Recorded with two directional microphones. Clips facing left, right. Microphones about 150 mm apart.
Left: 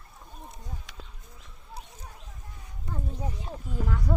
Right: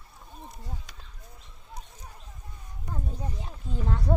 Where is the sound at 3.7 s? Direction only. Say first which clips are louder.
Right 2 dB; 25° right (ahead or behind).